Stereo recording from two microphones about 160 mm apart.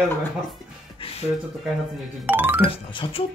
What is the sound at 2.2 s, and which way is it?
Music, 10° right (ahead or behind).